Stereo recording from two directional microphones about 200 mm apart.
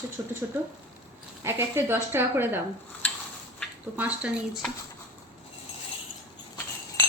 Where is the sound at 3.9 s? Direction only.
5° right (ahead or behind).